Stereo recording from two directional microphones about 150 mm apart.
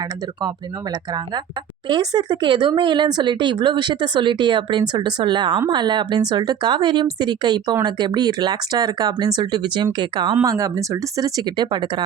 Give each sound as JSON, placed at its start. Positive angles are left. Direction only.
{"t": 1.9, "sound": "speech", "side_deg": -30}